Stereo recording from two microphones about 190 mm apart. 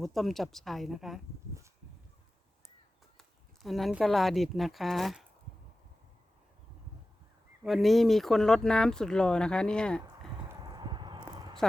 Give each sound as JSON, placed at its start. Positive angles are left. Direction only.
{"t": 0.0, "sound": "speech", "side_deg": 0}
{"t": 3.2, "sound": "speech", "side_deg": 0}
{"t": 7.6, "sound": "speech", "side_deg": 0}
{"t": 10.6, "sound": "a sound", "side_deg": -20}